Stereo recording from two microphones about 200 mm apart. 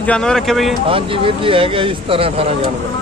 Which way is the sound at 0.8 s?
25° right (ahead or behind).